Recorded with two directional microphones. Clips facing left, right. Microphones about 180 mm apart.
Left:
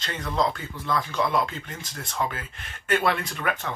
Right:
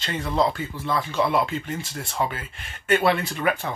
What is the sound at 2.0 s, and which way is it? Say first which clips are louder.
Speech: right 1 dB; 25° right (ahead or behind).